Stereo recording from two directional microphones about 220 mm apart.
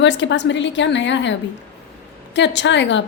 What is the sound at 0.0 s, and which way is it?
A woman's voice, 55° left (ahead or behind).